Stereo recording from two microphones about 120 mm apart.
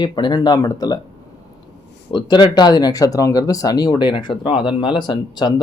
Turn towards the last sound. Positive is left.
turn(degrees=35)  # may be behind; listen again after turning